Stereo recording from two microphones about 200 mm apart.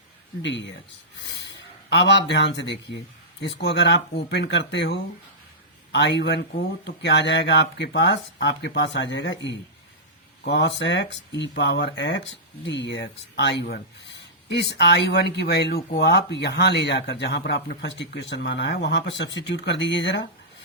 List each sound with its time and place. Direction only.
0.4 s speech: 65° left (ahead or behind)